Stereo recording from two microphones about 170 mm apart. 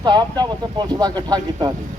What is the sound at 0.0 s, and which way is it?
Speech, 25° right (ahead or behind).